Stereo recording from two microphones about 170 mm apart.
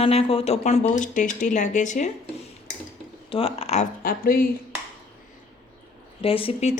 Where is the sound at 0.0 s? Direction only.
35° left (ahead or behind).